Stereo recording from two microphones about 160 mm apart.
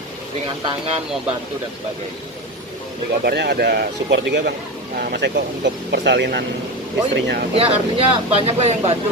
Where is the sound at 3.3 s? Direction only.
85° right.